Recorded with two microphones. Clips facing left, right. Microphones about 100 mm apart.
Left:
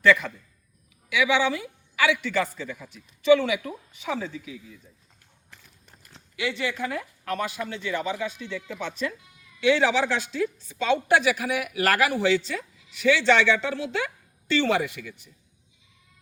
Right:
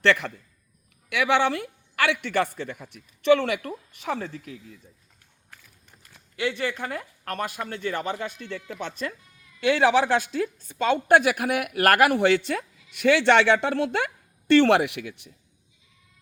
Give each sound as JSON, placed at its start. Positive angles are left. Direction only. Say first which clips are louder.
{"t": 0.0, "sound": "a man's voice", "louder": "left 2 dB", "side_deg": -70}
{"t": 1.1, "sound": "a woman's voice", "louder": "right 1 dB", "side_deg": -60}
{"t": 6.3, "sound": "speech", "louder": "right 1 dB", "side_deg": -45}
{"t": 9.6, "sound": "a woman's voice", "louder": "right 1 dB", "side_deg": -45}